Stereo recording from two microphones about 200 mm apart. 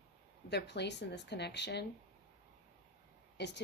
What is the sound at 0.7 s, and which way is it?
Speech, 60° left (ahead or behind).